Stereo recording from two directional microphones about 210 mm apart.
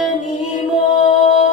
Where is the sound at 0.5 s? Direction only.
35° left (ahead or behind).